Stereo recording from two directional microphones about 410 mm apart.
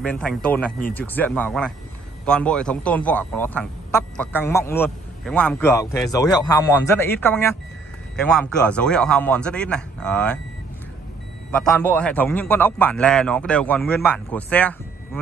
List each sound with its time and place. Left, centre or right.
0.0 s a man's voice: centre
11.5 s a man's voice: centre